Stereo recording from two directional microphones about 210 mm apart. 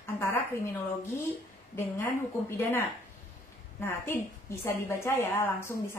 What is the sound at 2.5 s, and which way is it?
A woman's voice, 10° left (ahead or behind).